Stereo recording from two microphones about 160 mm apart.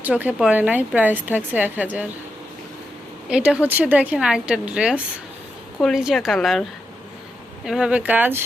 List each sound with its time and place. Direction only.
0.0 s a woman's voice: 10° right (ahead or behind)
3.2 s a woman's voice: 5° right (ahead or behind)